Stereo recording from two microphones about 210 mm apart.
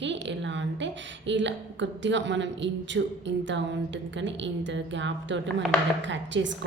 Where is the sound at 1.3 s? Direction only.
60° right (ahead or behind).